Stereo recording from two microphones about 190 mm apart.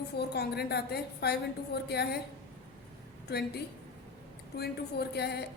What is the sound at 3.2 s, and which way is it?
A woman's voice, 60° left (ahead or behind).